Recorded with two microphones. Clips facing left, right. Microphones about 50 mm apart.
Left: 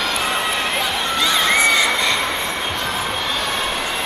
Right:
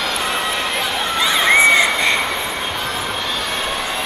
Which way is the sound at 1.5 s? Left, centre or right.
Right.